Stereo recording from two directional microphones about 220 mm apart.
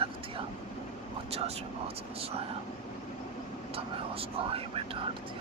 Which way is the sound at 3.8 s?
25° right (ahead or behind).